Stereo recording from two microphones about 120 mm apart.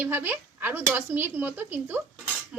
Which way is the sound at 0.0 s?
15° right (ahead or behind).